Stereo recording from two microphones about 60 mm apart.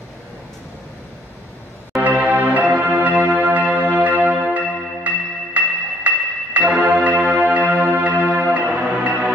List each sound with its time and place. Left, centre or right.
2.0 s bell: right
4.5 s music: right